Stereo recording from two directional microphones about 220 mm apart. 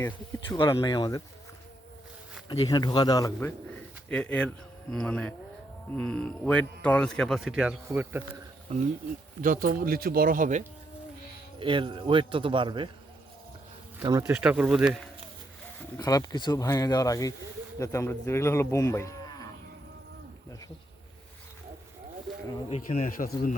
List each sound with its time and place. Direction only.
0.0 s speech: 15° left (ahead or behind)
2.5 s speech: 20° left (ahead or behind)
4.1 s a man's voice: 5° left (ahead or behind)
8.7 s speech: 30° right (ahead or behind)
11.6 s a man's voice: 20° right (ahead or behind)
14.0 s a man's voice: 15° right (ahead or behind)
16.0 s speech: 15° left (ahead or behind)
22.7 s a man's voice: 35° left (ahead or behind)